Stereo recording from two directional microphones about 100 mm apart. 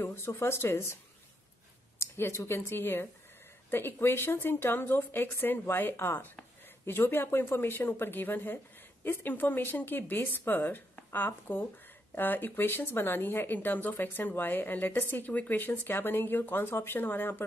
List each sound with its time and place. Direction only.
0.0 s speech: 25° left (ahead or behind)
2.0 s speech: 25° left (ahead or behind)